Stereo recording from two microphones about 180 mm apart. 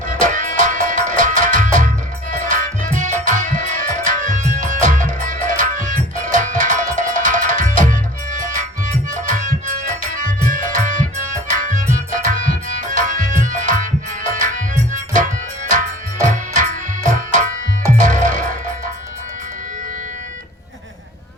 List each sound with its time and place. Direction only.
0.1 s music: 45° right (ahead or behind)